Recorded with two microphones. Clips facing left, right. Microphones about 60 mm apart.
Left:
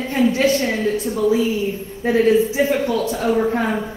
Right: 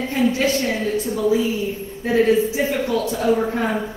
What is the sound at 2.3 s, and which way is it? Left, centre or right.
A man's voice, left.